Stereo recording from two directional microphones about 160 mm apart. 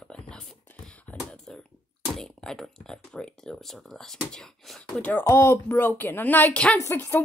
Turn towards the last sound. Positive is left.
turn(degrees=15)  # may be behind; listen again after turning